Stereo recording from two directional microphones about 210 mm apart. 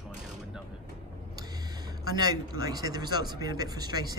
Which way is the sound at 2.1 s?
20° right (ahead or behind).